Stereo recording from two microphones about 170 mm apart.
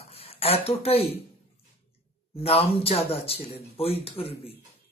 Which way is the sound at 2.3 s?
35° left (ahead or behind).